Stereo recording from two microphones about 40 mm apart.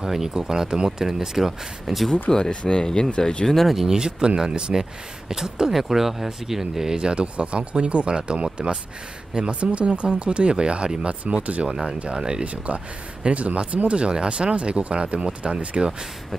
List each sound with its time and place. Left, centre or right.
0.0 s speech: centre
2.2 s speech: left
3.4 s speech: centre
3.7 s speech: centre
12.7 s speech: right